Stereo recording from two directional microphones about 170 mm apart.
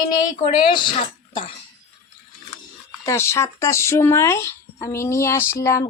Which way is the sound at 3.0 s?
15° left (ahead or behind).